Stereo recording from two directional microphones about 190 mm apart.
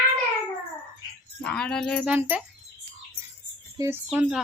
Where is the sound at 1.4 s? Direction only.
5° left (ahead or behind).